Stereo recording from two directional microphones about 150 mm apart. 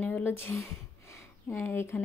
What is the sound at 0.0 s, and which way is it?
A woman's voice, 15° left (ahead or behind).